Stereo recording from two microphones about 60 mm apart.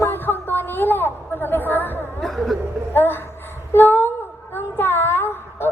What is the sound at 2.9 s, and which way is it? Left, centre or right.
Speech, left.